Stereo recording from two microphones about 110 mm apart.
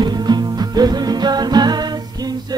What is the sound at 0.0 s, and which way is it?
Music, 40° right (ahead or behind).